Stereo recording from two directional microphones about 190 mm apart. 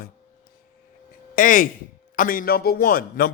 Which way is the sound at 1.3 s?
45° left (ahead or behind).